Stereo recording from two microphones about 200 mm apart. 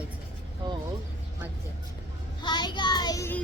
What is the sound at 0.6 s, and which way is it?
Speech, 20° right (ahead or behind).